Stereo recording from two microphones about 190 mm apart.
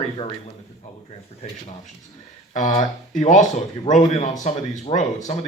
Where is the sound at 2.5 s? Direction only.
40° left (ahead or behind).